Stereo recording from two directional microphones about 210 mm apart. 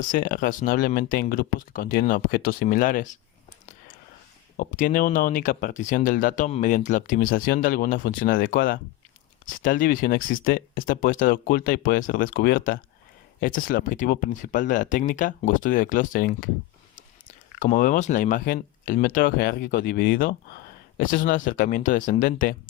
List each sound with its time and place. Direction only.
0.0 s speech: 40° left (ahead or behind)
4.5 s speech: 40° left (ahead or behind)
17.6 s speech: 40° left (ahead or behind)